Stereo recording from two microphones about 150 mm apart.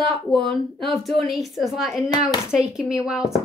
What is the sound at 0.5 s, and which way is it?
A woman's voice, 5° left (ahead or behind).